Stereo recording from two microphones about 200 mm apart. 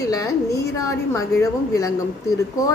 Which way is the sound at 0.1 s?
15° left (ahead or behind).